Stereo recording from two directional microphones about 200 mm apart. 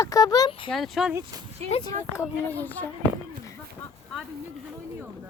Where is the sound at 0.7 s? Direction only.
Centre (ahead or behind).